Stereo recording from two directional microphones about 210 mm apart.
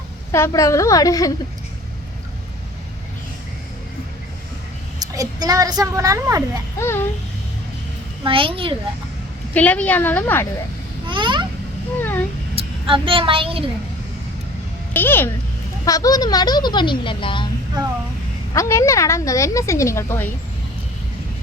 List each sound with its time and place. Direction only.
0.3 s speech: 15° left (ahead or behind)
4.9 s a child's voice: 15° right (ahead or behind)
6.7 s speech: 10° left (ahead or behind)
8.2 s a child's voice: 25° right (ahead or behind)
9.6 s speech: 5° left (ahead or behind)
11.0 s babbling: 20° right (ahead or behind)
11.9 s cat: 10° left (ahead or behind)
12.5 s a woman's voice: 25° right (ahead or behind)
14.9 s speech: 10° left (ahead or behind)
18.5 s speech: 15° left (ahead or behind)